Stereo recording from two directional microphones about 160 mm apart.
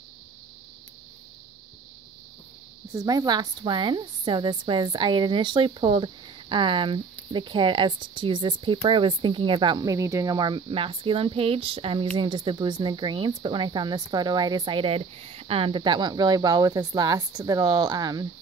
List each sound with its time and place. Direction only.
2.9 s a woman's voice: 20° right (ahead or behind)